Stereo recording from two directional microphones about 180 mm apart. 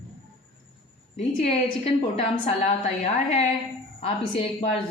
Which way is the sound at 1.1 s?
35° left (ahead or behind).